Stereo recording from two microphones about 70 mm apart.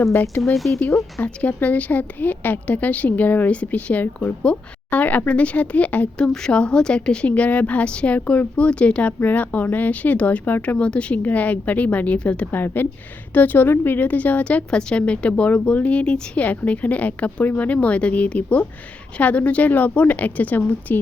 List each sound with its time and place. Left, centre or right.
0.5 s speech: centre
1.2 s speech: left
10.8 s a woman's voice: centre